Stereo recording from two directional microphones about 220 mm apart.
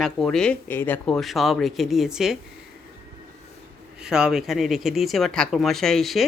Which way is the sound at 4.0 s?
5° right (ahead or behind).